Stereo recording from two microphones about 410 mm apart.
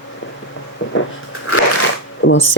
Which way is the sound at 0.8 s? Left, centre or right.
Left.